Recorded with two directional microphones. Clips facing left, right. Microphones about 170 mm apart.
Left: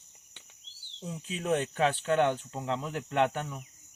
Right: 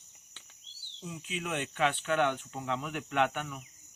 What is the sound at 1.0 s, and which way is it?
Speech, 35° left (ahead or behind).